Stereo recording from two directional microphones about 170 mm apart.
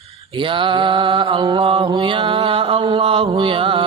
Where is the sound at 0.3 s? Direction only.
30° right (ahead or behind).